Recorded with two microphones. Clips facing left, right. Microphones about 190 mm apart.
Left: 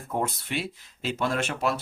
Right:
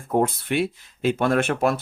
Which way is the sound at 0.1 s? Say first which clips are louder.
Right 8 dB; 55° right (ahead or behind).